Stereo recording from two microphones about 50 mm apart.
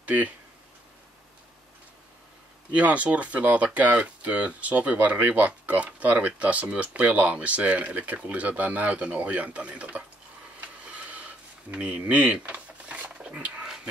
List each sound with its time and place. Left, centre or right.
0.0 s speech: right
2.7 s speech: right
10.6 s a sound: right